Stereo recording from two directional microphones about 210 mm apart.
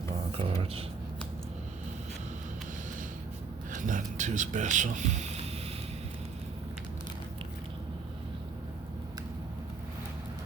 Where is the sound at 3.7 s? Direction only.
40° right (ahead or behind).